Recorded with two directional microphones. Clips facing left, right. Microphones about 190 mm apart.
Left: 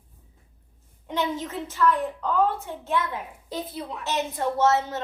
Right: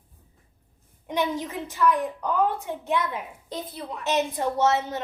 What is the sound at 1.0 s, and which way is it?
A woman's voice, 15° right (ahead or behind).